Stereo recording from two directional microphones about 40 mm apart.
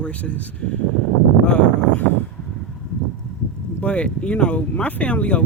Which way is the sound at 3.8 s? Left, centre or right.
Left.